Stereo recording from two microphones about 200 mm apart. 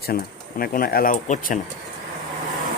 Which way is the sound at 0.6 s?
45° left (ahead or behind).